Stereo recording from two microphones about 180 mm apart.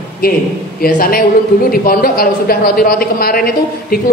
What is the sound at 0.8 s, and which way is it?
A woman's voice, 55° left (ahead or behind).